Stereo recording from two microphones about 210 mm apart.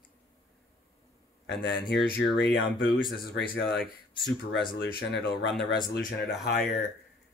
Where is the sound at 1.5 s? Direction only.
55° left (ahead or behind).